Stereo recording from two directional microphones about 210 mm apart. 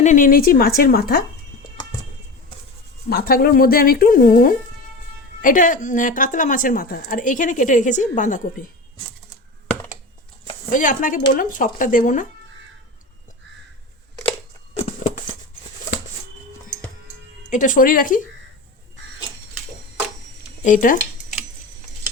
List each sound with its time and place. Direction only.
0.0 s speech: 35° left (ahead or behind)
3.1 s a woman's voice: 45° left (ahead or behind)
10.7 s a woman's voice: 40° left (ahead or behind)
17.5 s a woman's voice: 40° left (ahead or behind)
20.7 s a woman's voice: 40° left (ahead or behind)